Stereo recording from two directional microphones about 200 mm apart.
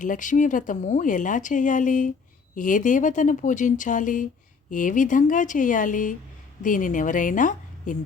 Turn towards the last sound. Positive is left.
turn(degrees=40)  # may be behind; listen again after turning